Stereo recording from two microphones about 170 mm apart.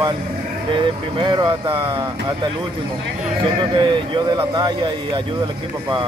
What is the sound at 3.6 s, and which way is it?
Speech, 30° right (ahead or behind).